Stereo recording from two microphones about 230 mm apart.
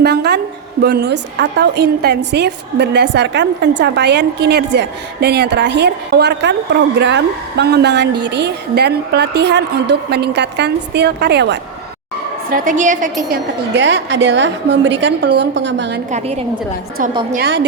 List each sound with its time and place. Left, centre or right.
0.0 s a woman's voice: right
12.5 s a woman's voice: right
13.7 s a woman's voice: right
16.1 s a woman's voice: right
17.3 s a woman's voice: right